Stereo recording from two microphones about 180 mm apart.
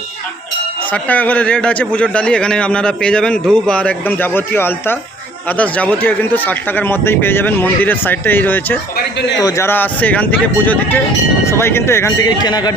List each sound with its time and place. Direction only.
0.9 s a man's voice: 10° left (ahead or behind)
9.0 s speech: 75° left (ahead or behind)
9.4 s a man's voice: 15° left (ahead or behind)